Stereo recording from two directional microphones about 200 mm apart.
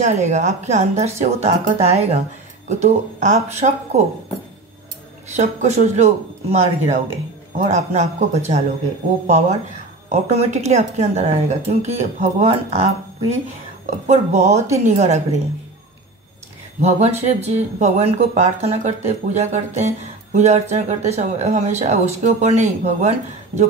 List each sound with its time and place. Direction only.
0.0 s speech: 35° right (ahead or behind)
5.3 s speech: 35° right (ahead or behind)
10.0 s speech: 35° right (ahead or behind)
16.8 s speech: 30° right (ahead or behind)